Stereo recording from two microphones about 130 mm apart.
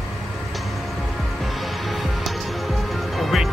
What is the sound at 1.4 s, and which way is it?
Music, centre (ahead or behind).